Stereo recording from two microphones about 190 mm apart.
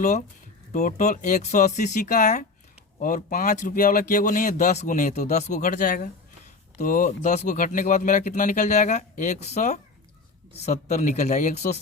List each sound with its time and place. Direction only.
0.7 s speech: 45° left (ahead or behind)